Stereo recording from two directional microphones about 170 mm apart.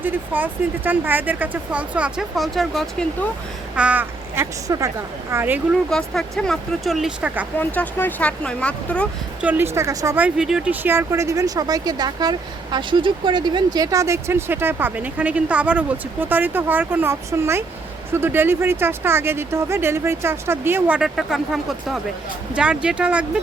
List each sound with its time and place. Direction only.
0.0 s speech: 10° right (ahead or behind)
3.8 s speech: 10° right (ahead or behind)
4.7 s speech: 20° right (ahead or behind)
5.9 s speech: centre (ahead or behind)
7.6 s speech: 10° left (ahead or behind)
9.4 s speech: 10° right (ahead or behind)